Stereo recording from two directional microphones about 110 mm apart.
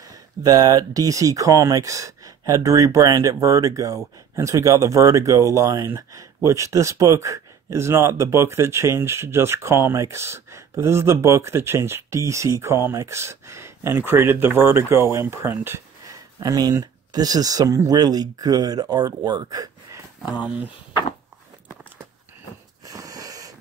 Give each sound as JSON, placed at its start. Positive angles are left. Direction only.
{"t": 0.1, "sound": "speech", "side_deg": -35}
{"t": 20.2, "sound": "speech", "side_deg": -15}
{"t": 22.8, "sound": "a sound", "side_deg": -35}